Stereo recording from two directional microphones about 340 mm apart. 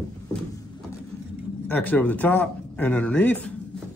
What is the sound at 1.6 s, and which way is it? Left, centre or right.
Speech, centre.